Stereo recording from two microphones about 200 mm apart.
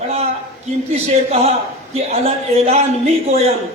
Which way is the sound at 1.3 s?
30° right (ahead or behind).